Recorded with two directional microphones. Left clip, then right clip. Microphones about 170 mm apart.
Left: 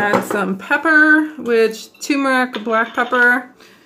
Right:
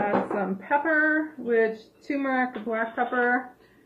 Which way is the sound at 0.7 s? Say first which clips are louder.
Left 11 dB; 55° left (ahead or behind).